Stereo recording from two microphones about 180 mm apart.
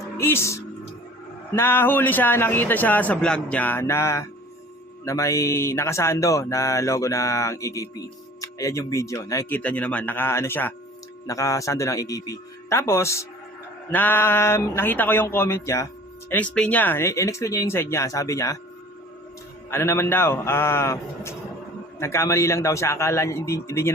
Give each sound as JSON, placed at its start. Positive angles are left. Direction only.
{"t": 0.2, "sound": "speech", "side_deg": 15}
{"t": 19.7, "sound": "speech", "side_deg": 15}